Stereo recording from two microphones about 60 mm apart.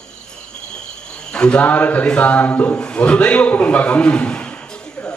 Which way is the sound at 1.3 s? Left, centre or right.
Centre.